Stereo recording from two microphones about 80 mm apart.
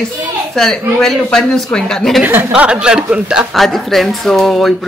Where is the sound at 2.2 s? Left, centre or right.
Right.